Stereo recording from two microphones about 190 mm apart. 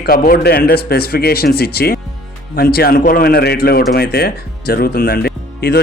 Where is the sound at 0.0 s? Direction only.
50° left (ahead or behind).